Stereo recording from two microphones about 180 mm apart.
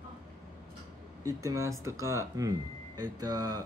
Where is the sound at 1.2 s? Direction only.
15° right (ahead or behind).